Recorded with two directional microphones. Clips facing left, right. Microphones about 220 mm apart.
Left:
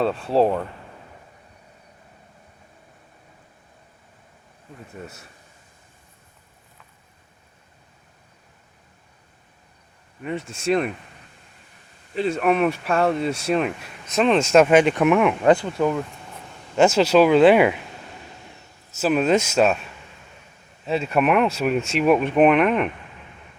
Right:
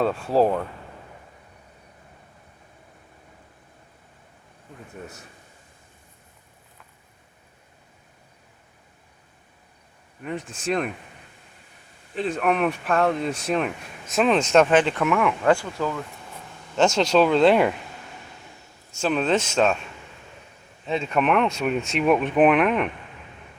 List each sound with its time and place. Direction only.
0.0 s speech: centre (ahead or behind)
10.4 s speech: 25° left (ahead or behind)
10.7 s speech: centre (ahead or behind)
12.1 s speech: centre (ahead or behind); by 16.0 s 20° left (ahead or behind)
16.7 s speech: 5° left (ahead or behind)
18.9 s speech: 5° left (ahead or behind)
20.8 s speech: 5° left (ahead or behind)